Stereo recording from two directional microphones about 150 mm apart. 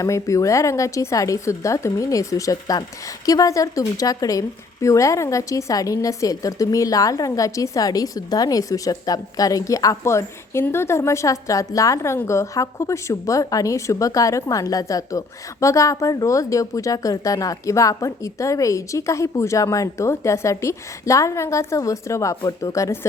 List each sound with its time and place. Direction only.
0.0 s a woman's voice: 20° left (ahead or behind)